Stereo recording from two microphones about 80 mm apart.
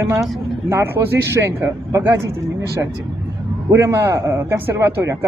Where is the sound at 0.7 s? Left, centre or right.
Right.